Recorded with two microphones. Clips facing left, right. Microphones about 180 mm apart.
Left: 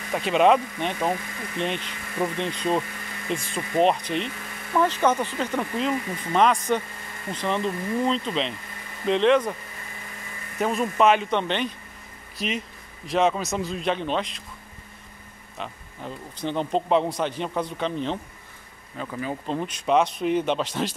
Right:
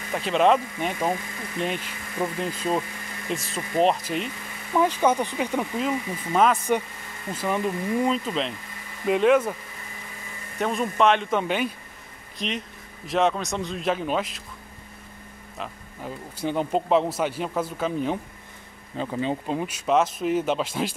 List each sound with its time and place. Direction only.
0.1 s speech: centre (ahead or behind)
10.6 s speech: centre (ahead or behind)
15.5 s speech: 5° right (ahead or behind)
18.9 s speech: 25° right (ahead or behind)
19.4 s speech: 10° right (ahead or behind)